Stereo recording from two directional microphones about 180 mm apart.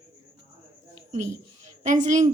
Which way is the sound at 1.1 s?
40° right (ahead or behind).